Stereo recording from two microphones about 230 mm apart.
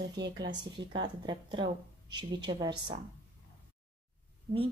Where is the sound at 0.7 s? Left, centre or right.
Centre.